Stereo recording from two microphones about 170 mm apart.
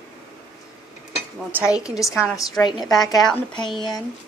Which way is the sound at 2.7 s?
25° left (ahead or behind).